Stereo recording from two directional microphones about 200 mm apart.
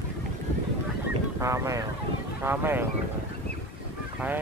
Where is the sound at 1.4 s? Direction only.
15° right (ahead or behind).